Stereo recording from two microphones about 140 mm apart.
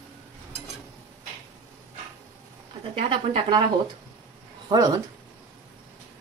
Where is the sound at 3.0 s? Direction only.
40° right (ahead or behind).